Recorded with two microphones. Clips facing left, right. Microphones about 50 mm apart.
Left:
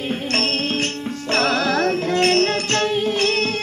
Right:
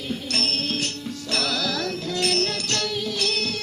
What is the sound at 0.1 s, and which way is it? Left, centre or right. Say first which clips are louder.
Music: left 4 dB; left.